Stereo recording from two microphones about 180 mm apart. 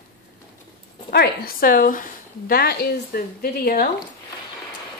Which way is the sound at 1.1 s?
60° left (ahead or behind).